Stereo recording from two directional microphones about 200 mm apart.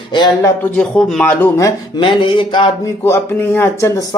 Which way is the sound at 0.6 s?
5° left (ahead or behind).